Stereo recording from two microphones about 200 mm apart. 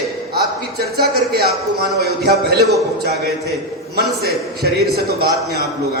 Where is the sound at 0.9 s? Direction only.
50° right (ahead or behind).